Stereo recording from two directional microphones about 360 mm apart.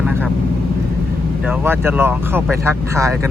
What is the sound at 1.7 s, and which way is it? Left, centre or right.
Speech, centre.